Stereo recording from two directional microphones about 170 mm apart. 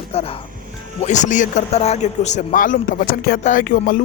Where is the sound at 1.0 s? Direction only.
45° left (ahead or behind).